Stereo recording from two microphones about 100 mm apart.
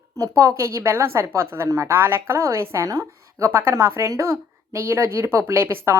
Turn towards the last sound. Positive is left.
turn(degrees=-25)  # may be behind; listen again after turning